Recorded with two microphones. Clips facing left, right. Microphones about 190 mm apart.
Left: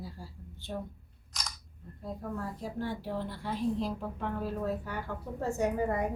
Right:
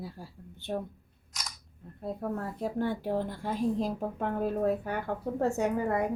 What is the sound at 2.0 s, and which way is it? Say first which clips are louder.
A woman's voice: right 4 dB; 60° right (ahead or behind).